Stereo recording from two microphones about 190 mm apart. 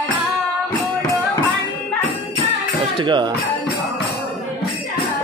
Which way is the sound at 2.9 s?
25° right (ahead or behind).